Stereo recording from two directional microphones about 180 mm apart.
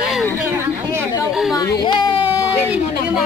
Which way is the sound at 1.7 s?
25° left (ahead or behind).